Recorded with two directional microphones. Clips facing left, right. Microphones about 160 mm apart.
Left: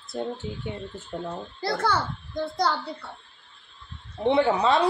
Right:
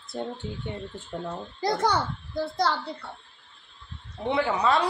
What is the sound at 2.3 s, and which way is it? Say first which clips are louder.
Speech: even; centre (ahead or behind).